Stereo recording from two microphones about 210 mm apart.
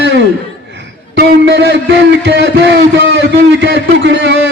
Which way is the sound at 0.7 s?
55° right (ahead or behind).